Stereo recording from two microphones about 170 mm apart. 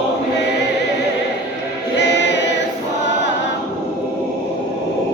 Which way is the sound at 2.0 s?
90° left.